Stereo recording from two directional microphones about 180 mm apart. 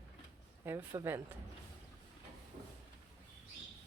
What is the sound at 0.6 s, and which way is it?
Speech, 15° right (ahead or behind).